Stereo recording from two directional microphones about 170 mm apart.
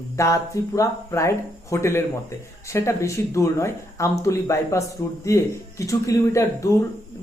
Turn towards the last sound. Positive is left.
turn(degrees=20)  # may be behind; listen again after turning